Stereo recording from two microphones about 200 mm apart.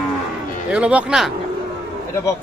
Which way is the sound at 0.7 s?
5° right (ahead or behind).